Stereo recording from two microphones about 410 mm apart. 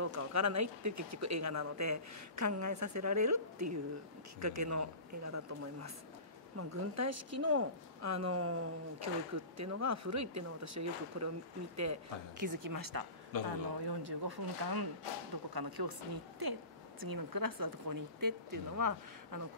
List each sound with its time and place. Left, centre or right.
0.0 s speech: right
7.0 s speech: right
13.4 s speech: right